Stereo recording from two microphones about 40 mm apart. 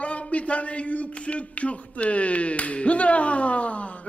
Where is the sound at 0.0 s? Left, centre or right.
Left.